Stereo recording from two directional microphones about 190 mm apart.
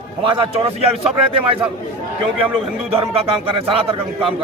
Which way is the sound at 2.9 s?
30° right (ahead or behind).